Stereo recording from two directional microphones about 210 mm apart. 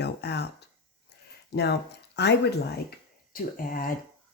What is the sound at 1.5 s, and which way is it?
Speech, 50° left (ahead or behind).